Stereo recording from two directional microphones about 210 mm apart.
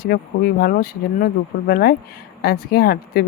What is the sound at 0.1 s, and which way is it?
Speech, 45° left (ahead or behind).